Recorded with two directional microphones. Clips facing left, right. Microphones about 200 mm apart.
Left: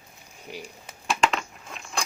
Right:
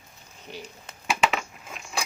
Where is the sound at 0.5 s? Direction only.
10° left (ahead or behind).